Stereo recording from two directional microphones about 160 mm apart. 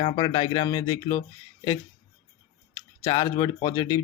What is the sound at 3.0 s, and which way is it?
Speech, 25° left (ahead or behind).